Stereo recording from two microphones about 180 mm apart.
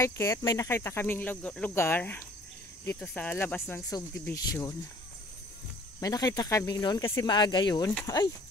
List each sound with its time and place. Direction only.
0.0 s cricket: 15° left (ahead or behind)
5.9 s speech: 20° left (ahead or behind)